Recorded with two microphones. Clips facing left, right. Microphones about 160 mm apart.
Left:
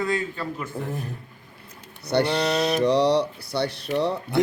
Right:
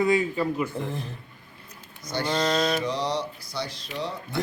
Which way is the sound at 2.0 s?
70° left (ahead or behind).